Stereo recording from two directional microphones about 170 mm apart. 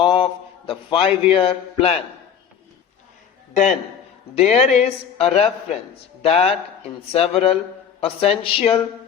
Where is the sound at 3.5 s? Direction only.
45° left (ahead or behind).